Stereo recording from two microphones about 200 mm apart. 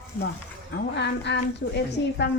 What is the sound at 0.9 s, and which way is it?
A woman's voice, 60° left (ahead or behind).